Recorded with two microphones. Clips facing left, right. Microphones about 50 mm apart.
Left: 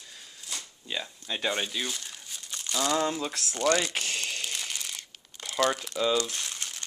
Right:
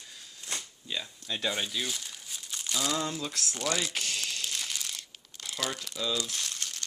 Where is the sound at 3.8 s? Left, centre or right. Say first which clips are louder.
Left 2 dB; left.